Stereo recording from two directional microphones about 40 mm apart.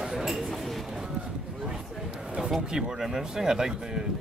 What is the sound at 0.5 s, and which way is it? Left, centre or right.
Chink, centre.